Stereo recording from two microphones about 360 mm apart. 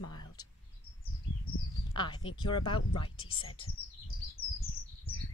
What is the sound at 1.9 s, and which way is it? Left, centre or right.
A woman's voice, centre.